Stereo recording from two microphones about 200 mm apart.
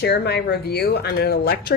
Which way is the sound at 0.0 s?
55° left (ahead or behind).